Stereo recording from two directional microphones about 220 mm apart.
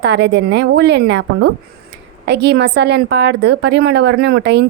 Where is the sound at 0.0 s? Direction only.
50° right (ahead or behind).